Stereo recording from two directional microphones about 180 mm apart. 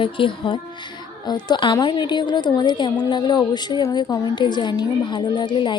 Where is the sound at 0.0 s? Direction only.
30° left (ahead or behind).